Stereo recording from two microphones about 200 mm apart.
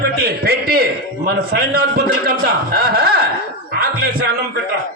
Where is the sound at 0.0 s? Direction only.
50° right (ahead or behind).